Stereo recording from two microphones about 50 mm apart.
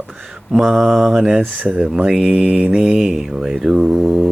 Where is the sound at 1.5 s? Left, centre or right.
Right.